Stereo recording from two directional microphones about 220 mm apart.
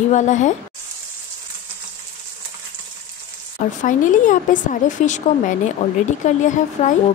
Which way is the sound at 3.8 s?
35° left (ahead or behind).